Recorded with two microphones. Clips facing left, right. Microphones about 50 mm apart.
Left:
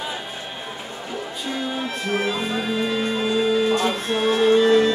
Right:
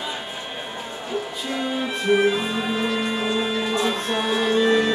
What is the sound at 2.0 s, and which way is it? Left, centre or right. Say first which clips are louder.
Music: right 5 dB; centre.